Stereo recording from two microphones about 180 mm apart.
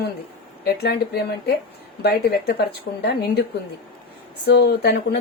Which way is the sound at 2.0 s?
60° left (ahead or behind).